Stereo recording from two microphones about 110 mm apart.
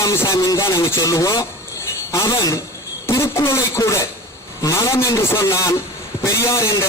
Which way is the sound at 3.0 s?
25° left (ahead or behind).